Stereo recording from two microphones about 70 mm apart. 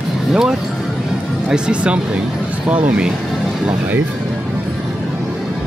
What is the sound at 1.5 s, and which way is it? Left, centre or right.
Speech, centre.